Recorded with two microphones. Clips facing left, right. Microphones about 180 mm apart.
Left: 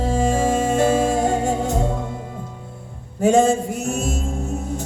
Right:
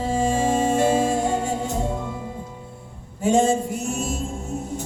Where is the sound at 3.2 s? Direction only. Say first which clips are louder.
Left 3 dB; 45° left (ahead or behind).